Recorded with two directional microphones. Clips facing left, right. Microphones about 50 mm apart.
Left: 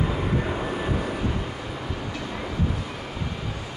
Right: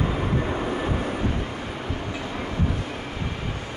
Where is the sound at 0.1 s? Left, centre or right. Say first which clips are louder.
Right 1 dB; centre.